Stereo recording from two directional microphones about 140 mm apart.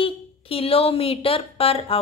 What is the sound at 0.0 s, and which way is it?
A woman's voice, 40° left (ahead or behind).